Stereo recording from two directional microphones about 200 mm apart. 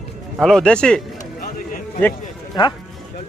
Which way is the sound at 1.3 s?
45° left (ahead or behind).